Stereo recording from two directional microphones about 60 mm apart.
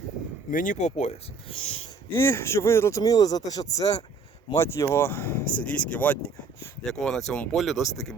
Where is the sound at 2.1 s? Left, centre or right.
Left.